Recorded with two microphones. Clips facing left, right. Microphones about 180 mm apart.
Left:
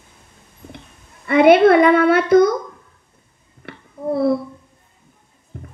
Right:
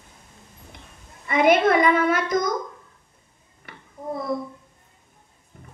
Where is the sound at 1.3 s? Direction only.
65° left (ahead or behind).